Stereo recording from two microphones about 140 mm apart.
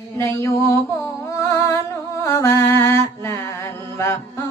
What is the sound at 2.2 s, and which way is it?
Mantra, 20° left (ahead or behind).